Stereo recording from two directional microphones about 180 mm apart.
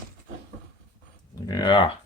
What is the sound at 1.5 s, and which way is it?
Speech, 25° left (ahead or behind).